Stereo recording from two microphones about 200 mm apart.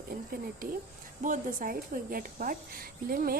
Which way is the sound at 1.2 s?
40° right (ahead or behind).